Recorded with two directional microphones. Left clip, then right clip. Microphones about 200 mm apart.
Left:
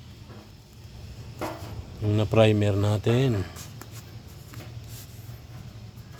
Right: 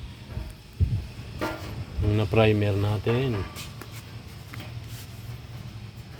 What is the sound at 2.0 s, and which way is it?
A man's voice, 20° left (ahead or behind).